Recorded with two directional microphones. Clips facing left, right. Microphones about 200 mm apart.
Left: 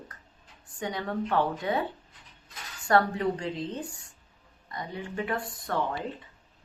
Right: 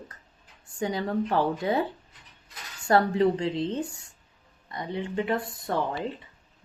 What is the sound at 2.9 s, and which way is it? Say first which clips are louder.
Speech: right 3 dB; 25° right (ahead or behind).